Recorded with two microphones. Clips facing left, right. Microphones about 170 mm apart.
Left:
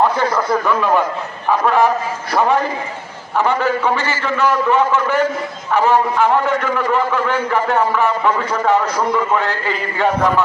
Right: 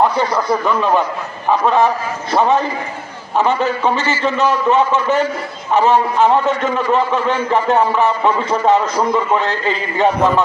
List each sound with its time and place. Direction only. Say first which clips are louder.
0.0 s a man's voice: right 1 dB; 20° right (ahead or behind)